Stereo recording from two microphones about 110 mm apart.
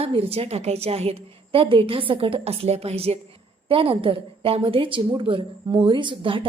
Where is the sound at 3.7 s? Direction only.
55° right (ahead or behind).